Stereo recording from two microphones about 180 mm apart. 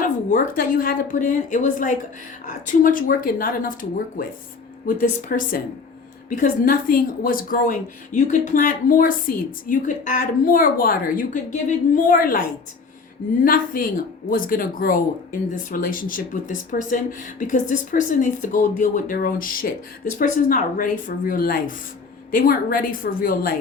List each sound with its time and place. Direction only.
0.3 s speech: 50° left (ahead or behind)
13.4 s speech: 50° left (ahead or behind)